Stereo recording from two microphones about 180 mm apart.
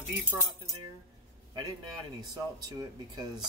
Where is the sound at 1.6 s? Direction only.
20° right (ahead or behind).